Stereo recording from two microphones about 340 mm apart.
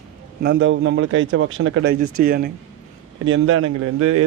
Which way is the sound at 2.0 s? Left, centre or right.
Right.